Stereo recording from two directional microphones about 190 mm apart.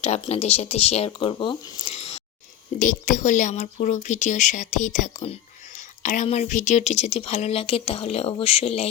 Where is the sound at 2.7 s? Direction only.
45° left (ahead or behind).